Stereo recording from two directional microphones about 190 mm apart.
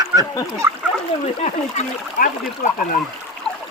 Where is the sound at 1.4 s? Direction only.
40° left (ahead or behind).